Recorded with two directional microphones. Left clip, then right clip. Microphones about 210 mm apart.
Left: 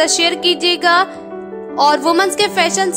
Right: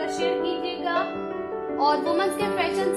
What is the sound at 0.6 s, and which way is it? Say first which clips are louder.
Music: left 13 dB; 35° left (ahead or behind).